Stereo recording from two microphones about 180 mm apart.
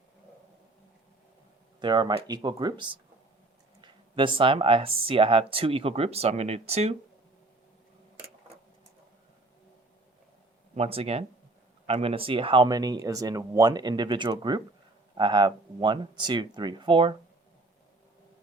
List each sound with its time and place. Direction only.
1.8 s speech: 25° right (ahead or behind)
10.8 s speech: 35° right (ahead or behind)